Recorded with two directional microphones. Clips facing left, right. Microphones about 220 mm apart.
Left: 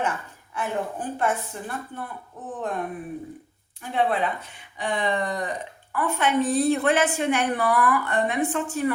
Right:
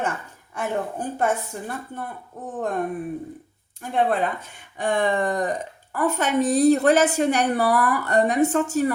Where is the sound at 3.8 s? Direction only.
45° right (ahead or behind).